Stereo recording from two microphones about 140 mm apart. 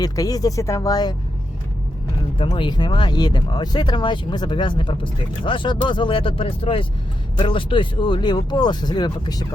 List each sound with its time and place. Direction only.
0.0 s speech: 25° left (ahead or behind)
2.4 s speech: 35° left (ahead or behind)